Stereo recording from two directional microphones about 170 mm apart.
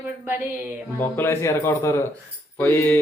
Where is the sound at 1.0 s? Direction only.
15° left (ahead or behind).